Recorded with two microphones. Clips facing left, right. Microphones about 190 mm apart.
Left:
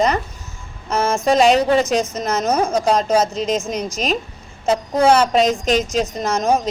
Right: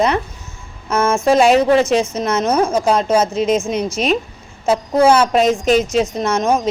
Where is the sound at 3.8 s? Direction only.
40° left (ahead or behind).